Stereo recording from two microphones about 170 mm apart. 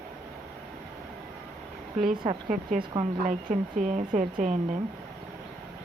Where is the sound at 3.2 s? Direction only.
50° right (ahead or behind).